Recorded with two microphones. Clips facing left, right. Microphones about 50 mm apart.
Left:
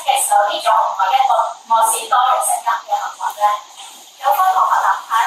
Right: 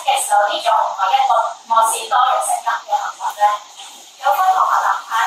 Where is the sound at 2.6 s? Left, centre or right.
Left.